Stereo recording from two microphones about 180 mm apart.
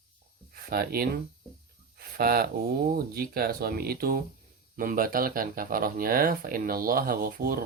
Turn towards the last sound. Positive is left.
turn(degrees=-55)  # may be behind; listen again after turning